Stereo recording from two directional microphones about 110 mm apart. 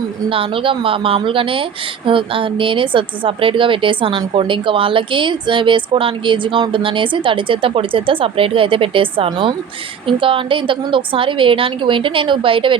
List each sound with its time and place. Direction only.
0.3 s speech: 55° right (ahead or behind)